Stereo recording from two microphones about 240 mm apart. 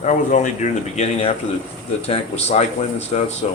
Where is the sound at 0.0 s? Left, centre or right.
Left.